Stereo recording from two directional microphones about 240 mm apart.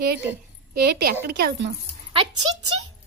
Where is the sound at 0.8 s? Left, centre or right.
Right.